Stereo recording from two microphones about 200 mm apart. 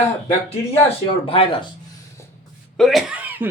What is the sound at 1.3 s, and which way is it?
Speech, 25° left (ahead or behind).